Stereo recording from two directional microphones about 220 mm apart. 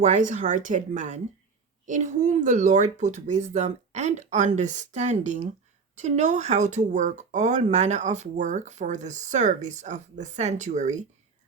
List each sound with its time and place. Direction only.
0.0 s speech: 35° right (ahead or behind)